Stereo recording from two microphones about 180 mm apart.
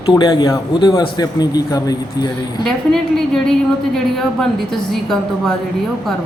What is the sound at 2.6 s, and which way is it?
A woman's voice, centre (ahead or behind).